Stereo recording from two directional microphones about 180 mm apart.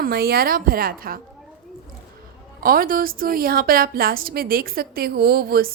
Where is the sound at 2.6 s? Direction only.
50° right (ahead or behind).